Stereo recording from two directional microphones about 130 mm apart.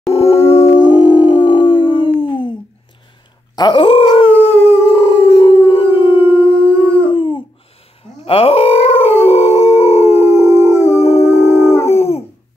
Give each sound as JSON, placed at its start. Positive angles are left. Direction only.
{"t": 0.1, "sound": "howl", "side_deg": 50}
{"t": 0.7, "sound": "howl", "side_deg": 35}
{"t": 3.5, "sound": "speech", "side_deg": 30}
{"t": 3.8, "sound": "howl", "side_deg": 45}
{"t": 10.7, "sound": "howl", "side_deg": 20}
{"t": 11.0, "sound": "howl", "side_deg": 50}
{"t": 11.4, "sound": "howl", "side_deg": 20}
{"t": 11.7, "sound": "dog", "side_deg": 55}